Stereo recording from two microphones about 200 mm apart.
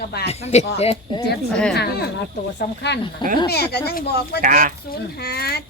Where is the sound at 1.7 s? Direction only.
55° left (ahead or behind).